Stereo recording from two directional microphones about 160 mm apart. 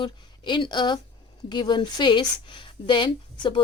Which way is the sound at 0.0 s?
30° left (ahead or behind).